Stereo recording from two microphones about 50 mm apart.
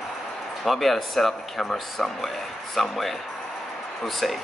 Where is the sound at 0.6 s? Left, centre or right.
Centre.